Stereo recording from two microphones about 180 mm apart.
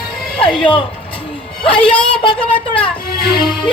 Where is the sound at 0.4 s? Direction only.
30° left (ahead or behind).